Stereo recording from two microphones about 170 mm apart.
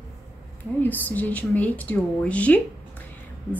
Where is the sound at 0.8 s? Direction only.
10° left (ahead or behind).